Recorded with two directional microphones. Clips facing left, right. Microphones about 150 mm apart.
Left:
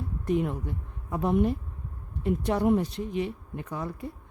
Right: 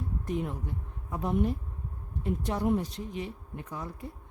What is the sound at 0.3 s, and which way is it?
Speech, 70° left (ahead or behind).